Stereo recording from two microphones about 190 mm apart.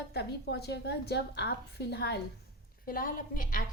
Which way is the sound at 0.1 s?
60° left (ahead or behind).